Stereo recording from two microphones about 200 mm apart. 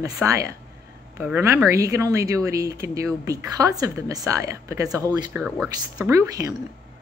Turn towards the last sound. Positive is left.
turn(degrees=-15)  # may be behind; listen again after turning